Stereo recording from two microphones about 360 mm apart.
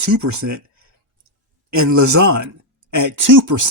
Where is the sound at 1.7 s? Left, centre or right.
Right.